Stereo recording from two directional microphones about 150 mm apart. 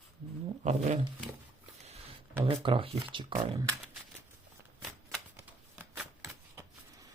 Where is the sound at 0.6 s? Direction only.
50° right (ahead or behind).